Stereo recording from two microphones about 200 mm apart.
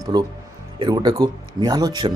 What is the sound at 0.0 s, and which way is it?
Speech, 20° right (ahead or behind).